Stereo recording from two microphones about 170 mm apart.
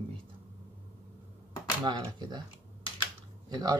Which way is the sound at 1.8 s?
25° right (ahead or behind).